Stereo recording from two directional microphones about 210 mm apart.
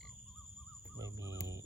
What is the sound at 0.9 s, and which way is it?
Music, 15° right (ahead or behind).